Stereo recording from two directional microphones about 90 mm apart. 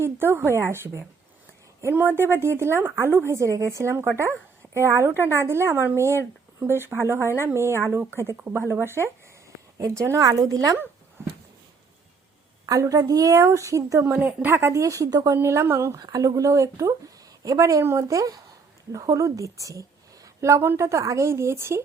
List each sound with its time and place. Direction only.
0.0 s a woman's voice: 25° right (ahead or behind)
12.6 s a woman's voice: 40° right (ahead or behind)
14.0 s a woman's voice: 20° right (ahead or behind); by 15.4 s 45° right (ahead or behind)
15.4 s a woman's voice: 30° right (ahead or behind)
16.0 s a woman's voice: 45° right (ahead or behind)